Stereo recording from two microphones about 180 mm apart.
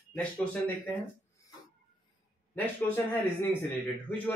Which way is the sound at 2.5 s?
10° left (ahead or behind).